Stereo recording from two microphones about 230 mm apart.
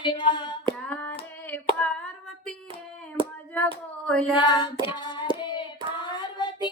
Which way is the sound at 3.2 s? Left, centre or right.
Right.